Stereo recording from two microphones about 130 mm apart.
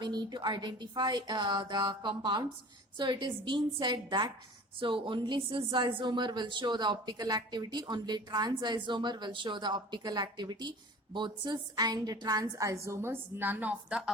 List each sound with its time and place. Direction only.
0.0 s speech: 35° right (ahead or behind); by 14.1 s 10° right (ahead or behind)